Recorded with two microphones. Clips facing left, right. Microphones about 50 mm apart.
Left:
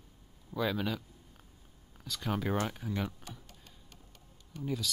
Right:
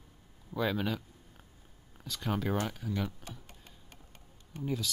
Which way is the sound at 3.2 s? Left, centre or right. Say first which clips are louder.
Right 1 dB; right.